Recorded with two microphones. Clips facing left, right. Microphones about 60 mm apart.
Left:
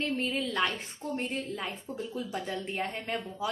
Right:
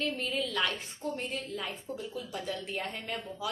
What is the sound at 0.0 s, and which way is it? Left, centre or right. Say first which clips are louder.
A woman's voice: left 2 dB; left.